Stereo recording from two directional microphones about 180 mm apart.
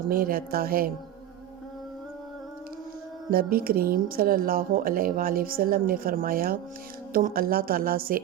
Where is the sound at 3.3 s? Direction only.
55° right (ahead or behind).